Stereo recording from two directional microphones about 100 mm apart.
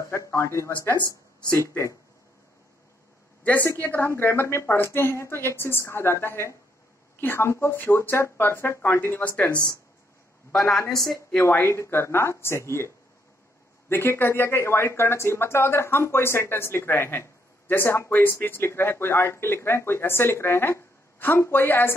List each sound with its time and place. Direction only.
0.0 s speech: 30° left (ahead or behind)
3.4 s speech: 20° left (ahead or behind)
10.5 s a woman's voice: 5° left (ahead or behind)
11.6 s speech: 30° left (ahead or behind)